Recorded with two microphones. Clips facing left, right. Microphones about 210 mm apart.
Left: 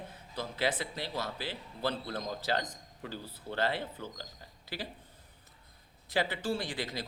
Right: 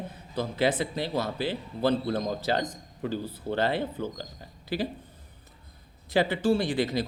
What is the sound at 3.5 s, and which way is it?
Speech, 20° right (ahead or behind).